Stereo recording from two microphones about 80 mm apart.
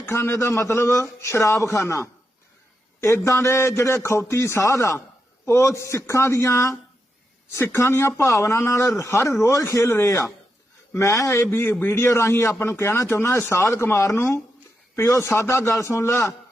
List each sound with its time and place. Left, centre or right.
0.0 s speech: left